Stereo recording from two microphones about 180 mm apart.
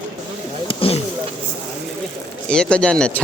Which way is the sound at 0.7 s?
30° left (ahead or behind).